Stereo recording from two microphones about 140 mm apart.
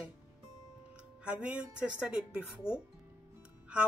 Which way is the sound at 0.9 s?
5° right (ahead or behind).